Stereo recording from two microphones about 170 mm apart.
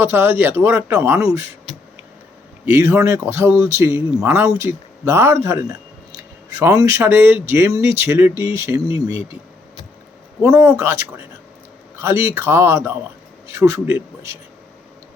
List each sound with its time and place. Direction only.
0.0 s speech: 15° right (ahead or behind)
2.7 s speech: 15° right (ahead or behind)
10.5 s speech: 15° right (ahead or behind)